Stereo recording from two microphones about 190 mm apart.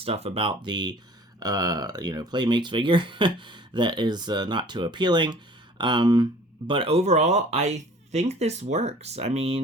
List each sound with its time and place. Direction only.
0.0 s speech: 30° right (ahead or behind)